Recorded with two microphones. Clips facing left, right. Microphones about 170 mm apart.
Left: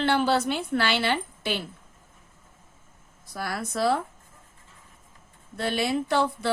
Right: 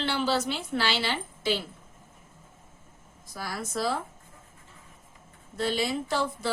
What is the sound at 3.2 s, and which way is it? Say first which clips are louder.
Speech: left 4 dB; 60° left (ahead or behind).